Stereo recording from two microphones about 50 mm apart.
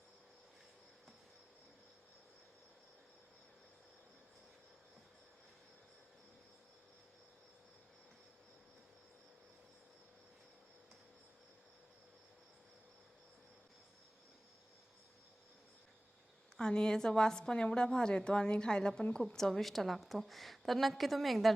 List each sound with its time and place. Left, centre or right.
16.6 s a woman's voice: centre